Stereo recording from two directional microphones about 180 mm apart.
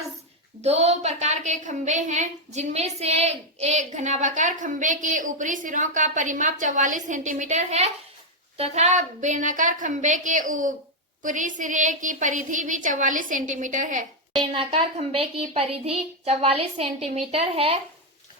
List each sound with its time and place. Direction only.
0.6 s a woman's voice: 35° right (ahead or behind)
14.5 s a woman's voice: 30° right (ahead or behind)